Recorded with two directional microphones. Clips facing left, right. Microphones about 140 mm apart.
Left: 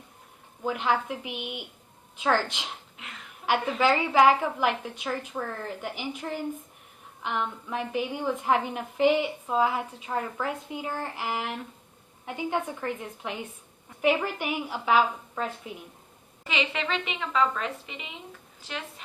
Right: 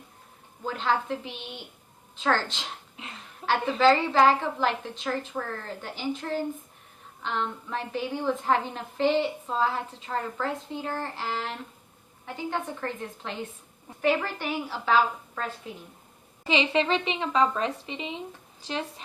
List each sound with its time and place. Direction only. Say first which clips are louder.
0.6 s a woman's voice: left 1 dB; 15° left (ahead or behind)
16.4 s speech: right 6 dB; 30° right (ahead or behind)